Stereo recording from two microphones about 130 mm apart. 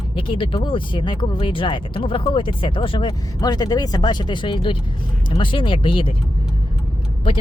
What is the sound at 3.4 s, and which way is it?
Speech, 30° left (ahead or behind).